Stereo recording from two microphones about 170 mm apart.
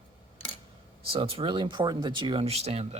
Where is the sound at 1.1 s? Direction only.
30° right (ahead or behind).